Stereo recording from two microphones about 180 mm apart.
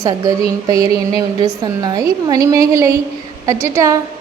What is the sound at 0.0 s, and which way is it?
Speech, 20° right (ahead or behind).